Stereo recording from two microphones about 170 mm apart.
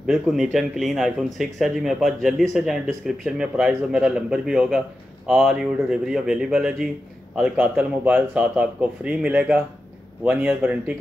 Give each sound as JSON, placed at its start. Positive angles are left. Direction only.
{"t": 0.0, "sound": "a man's voice", "side_deg": 0}